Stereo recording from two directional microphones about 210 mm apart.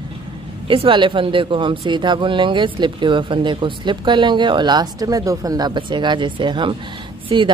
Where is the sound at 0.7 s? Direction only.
25° right (ahead or behind).